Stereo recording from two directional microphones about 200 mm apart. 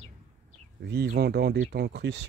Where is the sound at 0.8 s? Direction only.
55° right (ahead or behind).